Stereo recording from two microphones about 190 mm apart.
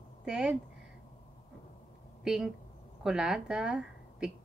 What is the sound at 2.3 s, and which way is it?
A woman's voice, 5° right (ahead or behind).